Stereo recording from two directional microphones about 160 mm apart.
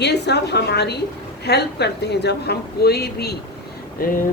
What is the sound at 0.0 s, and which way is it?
A woman's voice, 90° left.